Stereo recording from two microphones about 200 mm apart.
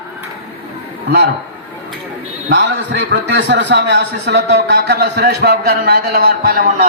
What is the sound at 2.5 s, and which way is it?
A man's voice, 60° right (ahead or behind).